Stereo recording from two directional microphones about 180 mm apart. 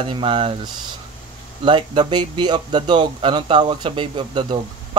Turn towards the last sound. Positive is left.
turn(degrees=-25)  # may be behind; listen again after turning